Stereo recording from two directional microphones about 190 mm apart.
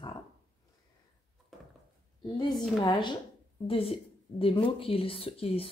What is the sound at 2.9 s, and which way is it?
Speech, 25° left (ahead or behind).